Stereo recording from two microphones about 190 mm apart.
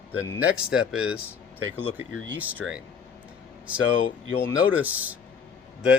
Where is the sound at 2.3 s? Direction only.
10° right (ahead or behind).